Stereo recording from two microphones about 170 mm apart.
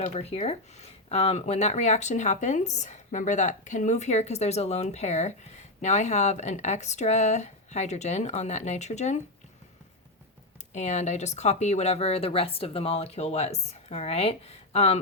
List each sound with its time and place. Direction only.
0.0 s speech: 40° left (ahead or behind)
10.8 s speech: 40° left (ahead or behind)